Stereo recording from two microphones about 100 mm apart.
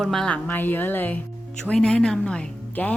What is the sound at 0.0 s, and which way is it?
Speech, 5° left (ahead or behind).